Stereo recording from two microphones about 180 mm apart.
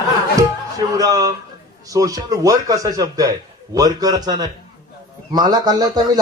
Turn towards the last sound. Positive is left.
turn(degrees=-20)  # may be behind; listen again after turning